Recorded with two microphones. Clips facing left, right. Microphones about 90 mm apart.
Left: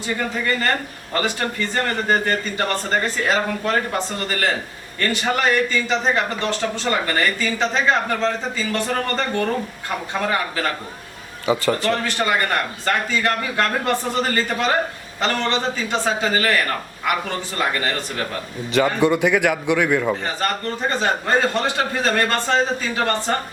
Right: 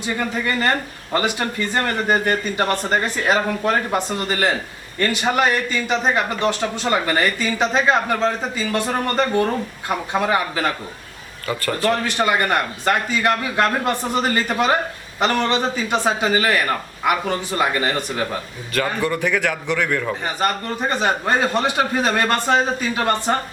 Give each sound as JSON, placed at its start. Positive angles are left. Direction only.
{"t": 1.1, "sound": "a man's voice", "side_deg": -15}
{"t": 11.4, "sound": "a man's voice", "side_deg": 20}
{"t": 11.9, "sound": "a man's voice", "side_deg": -15}
{"t": 18.7, "sound": "a man's voice", "side_deg": 20}
{"t": 20.4, "sound": "a man's voice", "side_deg": -15}